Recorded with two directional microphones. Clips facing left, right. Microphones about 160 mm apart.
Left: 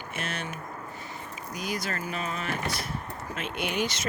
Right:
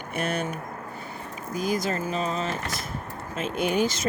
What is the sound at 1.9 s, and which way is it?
Speech, 30° right (ahead or behind).